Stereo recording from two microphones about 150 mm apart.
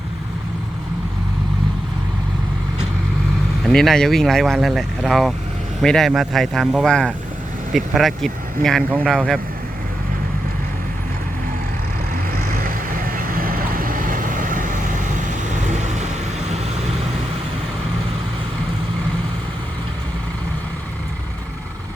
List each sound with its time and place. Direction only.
3.6 s speech: centre (ahead or behind)
12.3 s vehicle: 80° right; by 16.0 s 50° right (ahead or behind)